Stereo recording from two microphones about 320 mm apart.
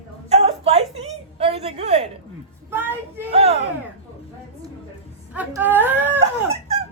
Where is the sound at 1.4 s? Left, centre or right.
Centre.